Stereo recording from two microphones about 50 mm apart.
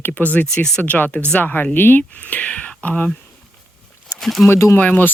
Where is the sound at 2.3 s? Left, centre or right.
Left.